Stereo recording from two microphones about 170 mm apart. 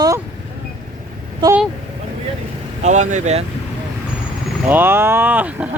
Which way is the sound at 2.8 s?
45° right (ahead or behind).